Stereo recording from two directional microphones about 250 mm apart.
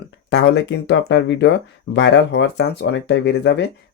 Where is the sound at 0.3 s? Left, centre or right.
Left.